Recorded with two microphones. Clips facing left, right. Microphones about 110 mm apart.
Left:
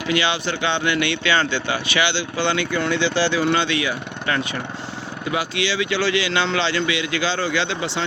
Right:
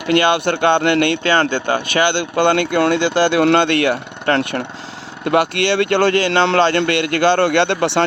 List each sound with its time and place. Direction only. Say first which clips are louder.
0.1 s speech: right 8 dB; 55° right (ahead or behind)